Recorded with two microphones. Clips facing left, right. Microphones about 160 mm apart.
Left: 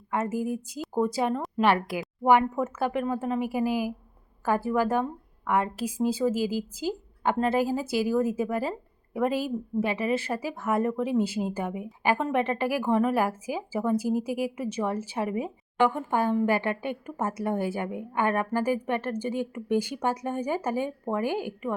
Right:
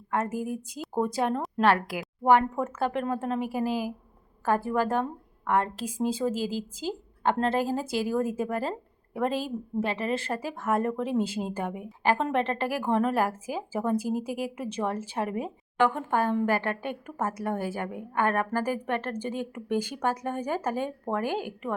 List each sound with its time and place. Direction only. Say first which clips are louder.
0.1 s a woman's voice: left 1 dB; 10° left (ahead or behind)
2.2 s speech: even; 10° left (ahead or behind)